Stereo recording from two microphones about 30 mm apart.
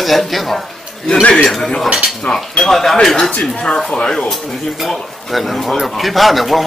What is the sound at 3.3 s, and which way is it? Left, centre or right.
Speech, left.